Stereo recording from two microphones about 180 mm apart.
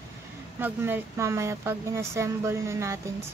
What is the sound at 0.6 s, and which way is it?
Speech, 10° right (ahead or behind).